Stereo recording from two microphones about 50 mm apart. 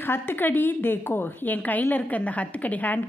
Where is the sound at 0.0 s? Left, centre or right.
Left.